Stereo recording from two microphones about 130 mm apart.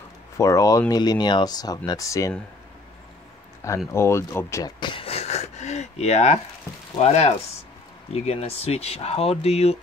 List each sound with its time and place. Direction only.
0.4 s speech: 25° left (ahead or behind)
3.6 s speech: 20° left (ahead or behind); by 9.8 s 50° left (ahead or behind)